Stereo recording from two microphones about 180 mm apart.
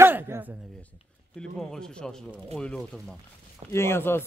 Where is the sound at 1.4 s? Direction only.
5° left (ahead or behind).